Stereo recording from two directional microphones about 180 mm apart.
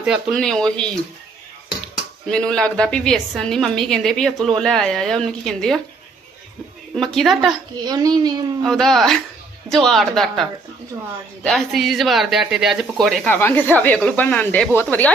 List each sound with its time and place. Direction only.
0.0 s a woman's voice: centre (ahead or behind)
2.3 s a woman's voice: 5° left (ahead or behind)
6.9 s a woman's voice: 5° left (ahead or behind)
7.9 s a child's voice: 20° right (ahead or behind)
8.6 s a woman's voice: centre (ahead or behind)